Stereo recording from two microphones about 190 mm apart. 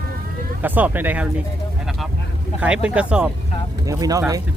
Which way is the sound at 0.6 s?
10° right (ahead or behind).